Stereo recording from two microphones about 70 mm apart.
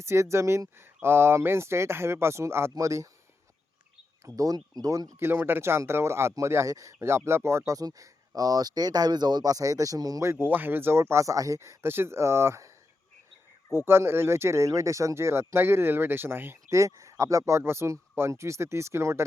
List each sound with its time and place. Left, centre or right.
0.0 s speech: right
4.4 s speech: right
5.2 s speech: right
6.7 s speech: right
7.3 s speech: right
10.2 s speech: right
13.7 s speech: right